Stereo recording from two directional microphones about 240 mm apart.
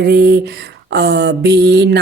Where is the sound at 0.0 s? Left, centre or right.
Right.